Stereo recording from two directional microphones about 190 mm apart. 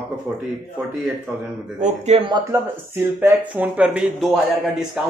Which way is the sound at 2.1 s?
35° right (ahead or behind).